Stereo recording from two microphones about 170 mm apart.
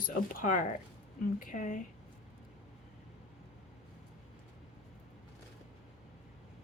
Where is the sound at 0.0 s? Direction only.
55° left (ahead or behind).